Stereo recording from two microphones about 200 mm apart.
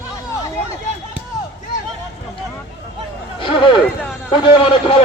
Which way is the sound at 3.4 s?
25° left (ahead or behind).